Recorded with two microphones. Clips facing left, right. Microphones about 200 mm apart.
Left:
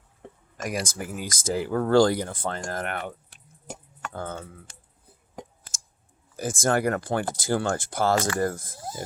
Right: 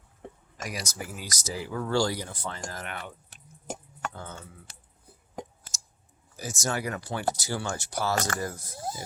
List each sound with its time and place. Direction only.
0.5 s speech: 50° left (ahead or behind)
3.2 s a sound: 40° right (ahead or behind)
4.1 s speech: 55° left (ahead or behind)
6.3 s speech: 50° left (ahead or behind)